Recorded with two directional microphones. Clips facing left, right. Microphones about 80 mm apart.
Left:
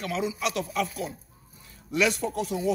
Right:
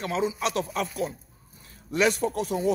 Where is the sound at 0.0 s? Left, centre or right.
Right.